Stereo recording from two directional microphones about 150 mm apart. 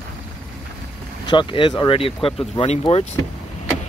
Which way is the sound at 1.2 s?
35° left (ahead or behind).